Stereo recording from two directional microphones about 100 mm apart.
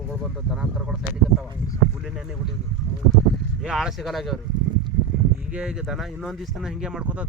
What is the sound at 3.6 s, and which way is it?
Speech, 5° right (ahead or behind).